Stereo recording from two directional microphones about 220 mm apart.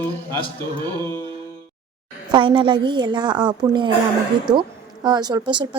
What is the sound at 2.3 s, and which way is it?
Speech, 25° right (ahead or behind).